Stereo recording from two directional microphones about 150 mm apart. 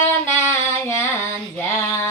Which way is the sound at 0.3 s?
15° left (ahead or behind).